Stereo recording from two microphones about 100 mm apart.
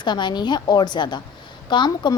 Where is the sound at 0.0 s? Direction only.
50° left (ahead or behind).